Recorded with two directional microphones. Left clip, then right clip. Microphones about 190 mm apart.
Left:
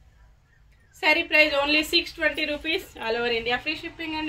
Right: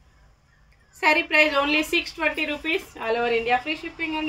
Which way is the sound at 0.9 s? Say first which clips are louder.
Right 1 dB; 15° right (ahead or behind).